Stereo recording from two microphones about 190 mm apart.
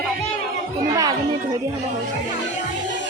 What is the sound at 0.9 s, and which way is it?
Speech, 20° right (ahead or behind).